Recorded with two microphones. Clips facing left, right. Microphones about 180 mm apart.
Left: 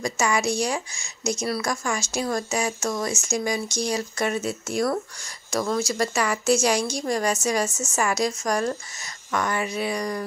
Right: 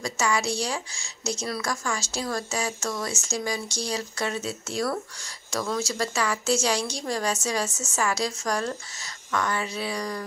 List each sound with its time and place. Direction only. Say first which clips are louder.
0.0 s a woman's voice: left 3 dB; 15° left (ahead or behind)